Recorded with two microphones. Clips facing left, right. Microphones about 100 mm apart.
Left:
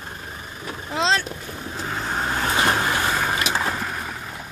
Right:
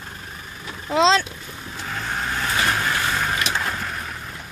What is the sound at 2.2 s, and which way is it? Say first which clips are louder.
Vehicle: left 2 dB; 35° left (ahead or behind).